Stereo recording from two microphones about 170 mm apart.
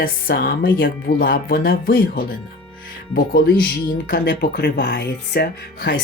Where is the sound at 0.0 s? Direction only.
60° left (ahead or behind).